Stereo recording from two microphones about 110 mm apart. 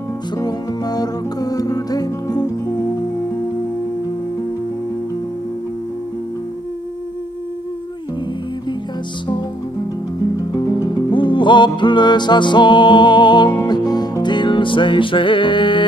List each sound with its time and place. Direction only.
0.4 s music: 35° left (ahead or behind)
11.1 s music: 45° left (ahead or behind)